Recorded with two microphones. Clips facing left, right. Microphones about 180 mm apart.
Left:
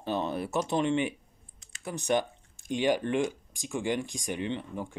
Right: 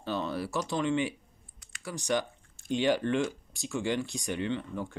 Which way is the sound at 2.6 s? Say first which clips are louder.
Even; 15° left (ahead or behind).